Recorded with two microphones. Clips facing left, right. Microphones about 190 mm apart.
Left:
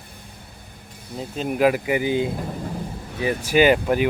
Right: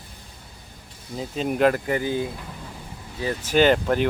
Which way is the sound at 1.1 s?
Centre (ahead or behind).